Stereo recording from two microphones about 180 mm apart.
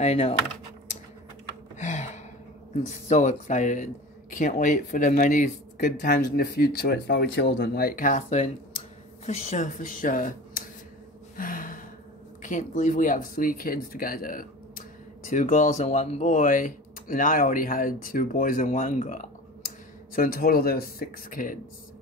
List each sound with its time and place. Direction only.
0.0 s speech: 35° left (ahead or behind)
1.8 s gasp: 40° left (ahead or behind)
2.7 s speech: 40° left (ahead or behind)
11.3 s gasp: 50° left (ahead or behind)
12.4 s speech: 45° left (ahead or behind)